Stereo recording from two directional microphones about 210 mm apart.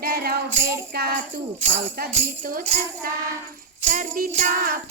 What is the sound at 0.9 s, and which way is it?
Speech, 45° right (ahead or behind).